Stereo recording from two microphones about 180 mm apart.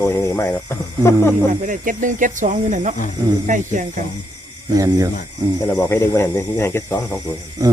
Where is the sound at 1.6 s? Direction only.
45° right (ahead or behind).